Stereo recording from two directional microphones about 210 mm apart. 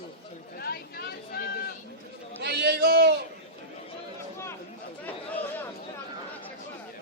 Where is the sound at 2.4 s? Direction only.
50° right (ahead or behind).